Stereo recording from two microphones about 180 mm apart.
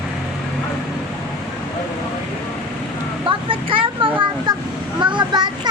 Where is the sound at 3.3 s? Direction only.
30° right (ahead or behind).